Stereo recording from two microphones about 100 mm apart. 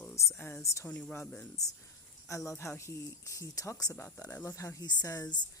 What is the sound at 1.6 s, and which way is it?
Speech, 35° left (ahead or behind).